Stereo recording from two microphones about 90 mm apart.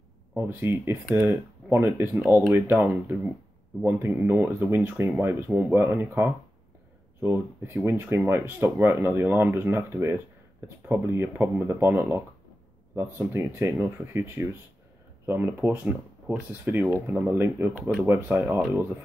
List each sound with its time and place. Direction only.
0.4 s speech: 25° right (ahead or behind)